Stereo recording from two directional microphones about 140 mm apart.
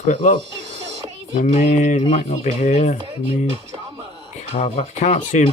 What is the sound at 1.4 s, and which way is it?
Speech, 55° left (ahead or behind).